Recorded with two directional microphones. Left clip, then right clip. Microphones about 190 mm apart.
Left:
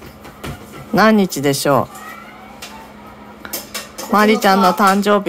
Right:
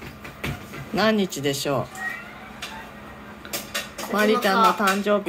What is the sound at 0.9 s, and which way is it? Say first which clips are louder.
Speech: left 9 dB; 40° left (ahead or behind).